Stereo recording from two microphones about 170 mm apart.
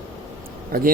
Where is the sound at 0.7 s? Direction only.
60° right (ahead or behind).